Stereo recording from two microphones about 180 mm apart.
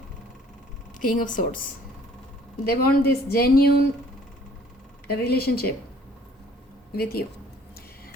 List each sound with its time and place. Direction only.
0.9 s speech: 50° left (ahead or behind)
2.6 s speech: 55° left (ahead or behind)
5.0 s speech: 60° left (ahead or behind)
6.9 s speech: 60° left (ahead or behind)